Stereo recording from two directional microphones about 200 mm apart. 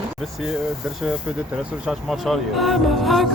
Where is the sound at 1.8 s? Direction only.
Centre (ahead or behind).